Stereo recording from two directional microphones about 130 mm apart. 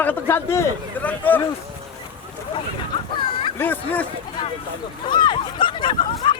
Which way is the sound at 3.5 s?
15° left (ahead or behind).